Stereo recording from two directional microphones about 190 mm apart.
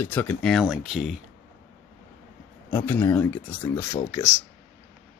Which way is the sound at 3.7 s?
20° left (ahead or behind).